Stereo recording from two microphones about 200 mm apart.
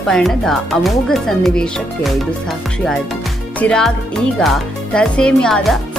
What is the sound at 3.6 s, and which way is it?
Speech, 5° left (ahead or behind).